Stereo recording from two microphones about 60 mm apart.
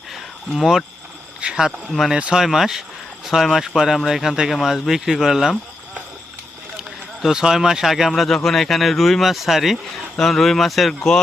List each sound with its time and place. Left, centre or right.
0.1 s cricket: centre
1.4 s a sound: centre
1.9 s speech: centre
2.1 s speech: centre
2.4 s speech: centre
6.7 s speech: centre